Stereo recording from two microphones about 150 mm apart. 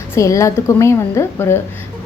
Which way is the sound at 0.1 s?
20° left (ahead or behind).